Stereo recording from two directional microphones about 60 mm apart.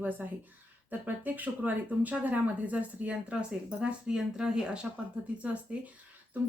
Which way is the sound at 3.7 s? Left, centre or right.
Centre.